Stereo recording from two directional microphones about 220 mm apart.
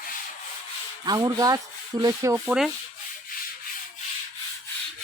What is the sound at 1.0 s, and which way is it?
Sanding, 15° right (ahead or behind).